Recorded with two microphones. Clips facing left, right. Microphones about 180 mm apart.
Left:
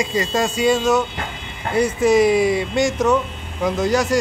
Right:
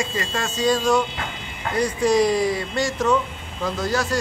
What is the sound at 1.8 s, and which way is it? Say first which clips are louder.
Speech: left 4 dB; 5° left (ahead or behind).